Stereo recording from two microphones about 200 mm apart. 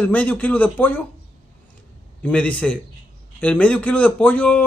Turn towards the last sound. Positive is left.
turn(degrees=5)  # may be behind; listen again after turning